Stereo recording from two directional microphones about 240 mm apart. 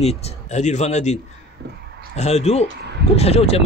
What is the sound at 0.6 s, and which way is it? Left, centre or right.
Speech, left.